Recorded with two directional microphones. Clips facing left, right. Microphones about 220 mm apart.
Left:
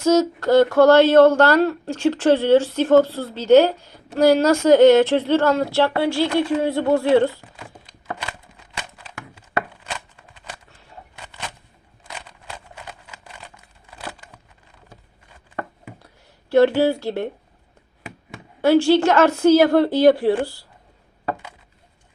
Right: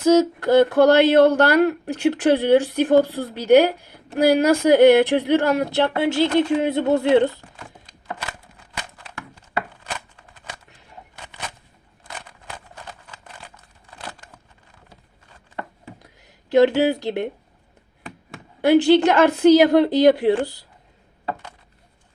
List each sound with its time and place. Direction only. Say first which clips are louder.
0.1 s a woman's voice: right 1 dB; 15° right (ahead or behind)
16.0 s a sound: right 2 dB; 15° right (ahead or behind)
18.6 s a woman's voice: right 1 dB; 15° right (ahead or behind)